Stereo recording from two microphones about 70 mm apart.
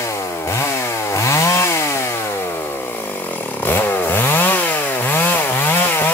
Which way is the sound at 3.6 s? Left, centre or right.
Left.